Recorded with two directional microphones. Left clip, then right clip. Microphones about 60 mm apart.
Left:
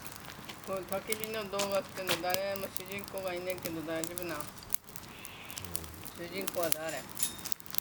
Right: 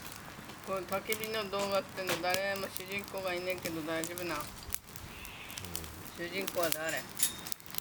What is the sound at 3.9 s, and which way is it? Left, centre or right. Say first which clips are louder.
Speech: even; right.